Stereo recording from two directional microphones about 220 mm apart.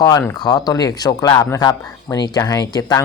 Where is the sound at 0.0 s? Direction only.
15° left (ahead or behind).